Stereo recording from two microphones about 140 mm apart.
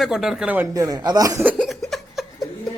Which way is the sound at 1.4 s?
10° right (ahead or behind).